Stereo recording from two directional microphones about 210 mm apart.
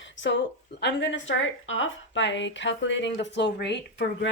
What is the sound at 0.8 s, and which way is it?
A woman's voice, 60° left (ahead or behind).